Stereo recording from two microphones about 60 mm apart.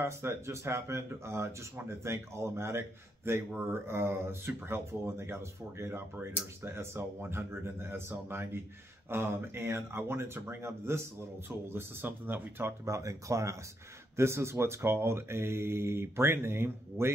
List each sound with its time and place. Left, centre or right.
0.0 s speech: right
12.8 s speech: right
14.1 s speech: right